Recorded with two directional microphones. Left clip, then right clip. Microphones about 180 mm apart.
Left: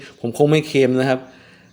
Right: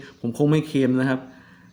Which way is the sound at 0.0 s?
25° left (ahead or behind).